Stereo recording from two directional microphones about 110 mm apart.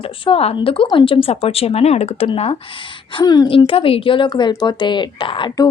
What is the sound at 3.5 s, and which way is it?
A woman's voice, 55° left (ahead or behind).